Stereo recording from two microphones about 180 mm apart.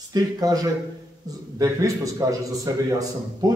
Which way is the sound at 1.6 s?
20° right (ahead or behind).